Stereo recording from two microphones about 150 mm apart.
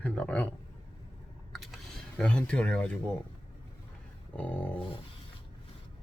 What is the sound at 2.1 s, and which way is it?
Speech, 5° left (ahead or behind).